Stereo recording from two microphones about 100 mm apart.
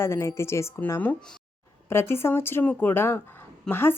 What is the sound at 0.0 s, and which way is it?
A woman's voice, 25° left (ahead or behind).